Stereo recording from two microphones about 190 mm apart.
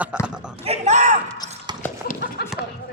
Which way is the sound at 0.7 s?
35° right (ahead or behind).